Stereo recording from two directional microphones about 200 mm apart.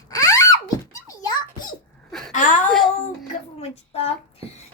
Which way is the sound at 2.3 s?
40° left (ahead or behind).